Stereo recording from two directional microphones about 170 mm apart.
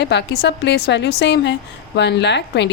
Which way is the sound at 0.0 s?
85° left.